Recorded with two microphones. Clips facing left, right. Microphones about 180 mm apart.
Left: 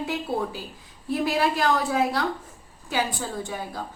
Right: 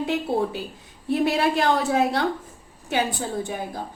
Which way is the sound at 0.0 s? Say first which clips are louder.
Right 4 dB; 25° right (ahead or behind).